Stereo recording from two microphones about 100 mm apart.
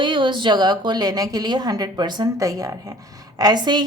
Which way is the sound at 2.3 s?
35° right (ahead or behind).